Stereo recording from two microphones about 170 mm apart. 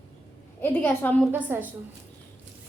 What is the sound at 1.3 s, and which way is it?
Speech, 10° right (ahead or behind).